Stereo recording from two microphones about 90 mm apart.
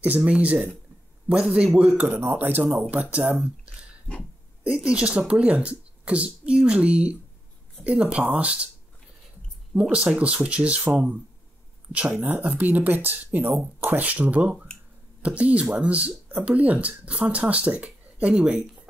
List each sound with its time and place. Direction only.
0.0 s speech: 15° right (ahead or behind)
4.6 s speech: 10° right (ahead or behind)
9.8 s speech: 15° right (ahead or behind)